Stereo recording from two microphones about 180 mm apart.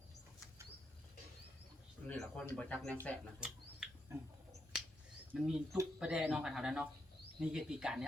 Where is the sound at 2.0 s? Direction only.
5° left (ahead or behind).